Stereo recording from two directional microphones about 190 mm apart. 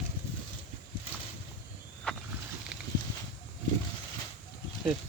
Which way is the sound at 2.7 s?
5° right (ahead or behind).